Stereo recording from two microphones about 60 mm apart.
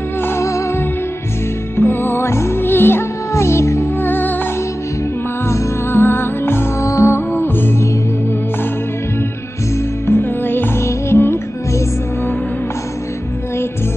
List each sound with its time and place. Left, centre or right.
0.4 s music: left
1.8 s music: left
4.0 s music: left
5.5 s music: left
6.8 s music: left
7.2 s music: left
10.0 s music: left
10.8 s music: left